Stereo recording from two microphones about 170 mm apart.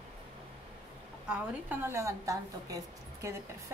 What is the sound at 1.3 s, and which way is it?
A woman's voice, 10° right (ahead or behind).